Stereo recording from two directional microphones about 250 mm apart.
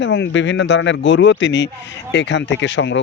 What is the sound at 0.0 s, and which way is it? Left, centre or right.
Speech, left.